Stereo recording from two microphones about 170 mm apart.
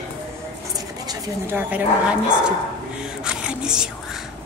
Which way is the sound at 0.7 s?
20° right (ahead or behind).